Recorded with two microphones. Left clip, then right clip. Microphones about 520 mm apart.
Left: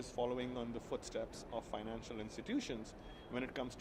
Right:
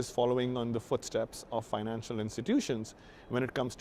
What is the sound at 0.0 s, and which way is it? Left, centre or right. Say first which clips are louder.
A man's voice: right 10 dB; right.